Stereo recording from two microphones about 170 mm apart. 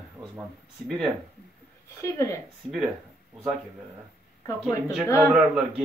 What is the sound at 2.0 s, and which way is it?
Speech, 20° left (ahead or behind).